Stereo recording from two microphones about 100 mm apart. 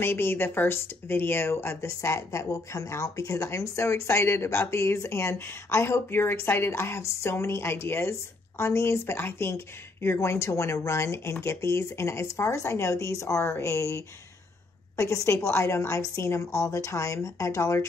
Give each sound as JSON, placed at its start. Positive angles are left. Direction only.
{"t": 0.0, "sound": "a woman's voice", "side_deg": 20}